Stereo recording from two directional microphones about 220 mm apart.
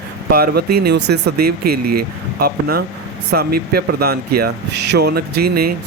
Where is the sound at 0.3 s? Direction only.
45° right (ahead or behind).